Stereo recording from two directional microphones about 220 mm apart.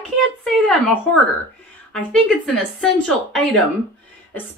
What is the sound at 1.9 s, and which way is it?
A woman's voice, 5° left (ahead or behind).